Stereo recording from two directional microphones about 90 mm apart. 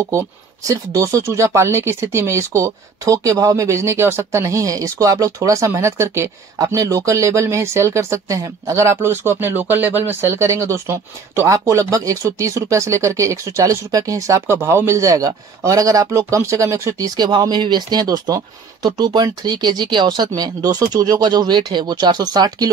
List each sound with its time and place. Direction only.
0.0 s speech: 30° right (ahead or behind)
10.2 s speech: 30° right (ahead or behind)
17.2 s speech: 50° right (ahead or behind)